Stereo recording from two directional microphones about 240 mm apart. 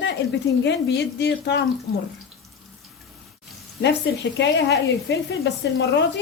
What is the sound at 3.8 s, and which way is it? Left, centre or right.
A woman's voice, left.